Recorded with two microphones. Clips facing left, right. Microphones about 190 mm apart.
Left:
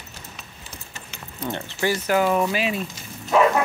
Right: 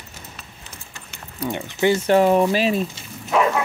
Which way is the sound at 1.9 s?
30° right (ahead or behind).